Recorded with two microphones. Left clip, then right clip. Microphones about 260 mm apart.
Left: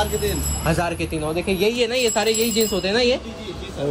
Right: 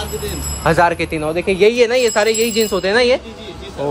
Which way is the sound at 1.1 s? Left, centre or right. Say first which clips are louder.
Right 5 dB; right.